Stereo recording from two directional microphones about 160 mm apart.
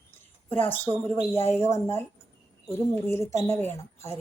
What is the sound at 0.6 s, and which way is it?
A woman's voice, 15° left (ahead or behind).